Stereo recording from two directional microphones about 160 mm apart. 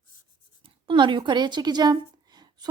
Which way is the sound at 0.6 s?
30° right (ahead or behind).